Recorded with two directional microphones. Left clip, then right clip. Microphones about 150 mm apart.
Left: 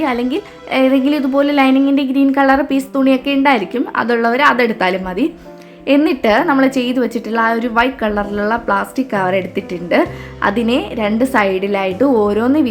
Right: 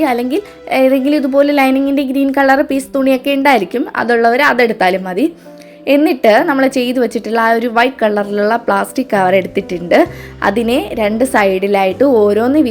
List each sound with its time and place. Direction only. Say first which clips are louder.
0.0 s a woman's voice: right 3 dB; 25° right (ahead or behind)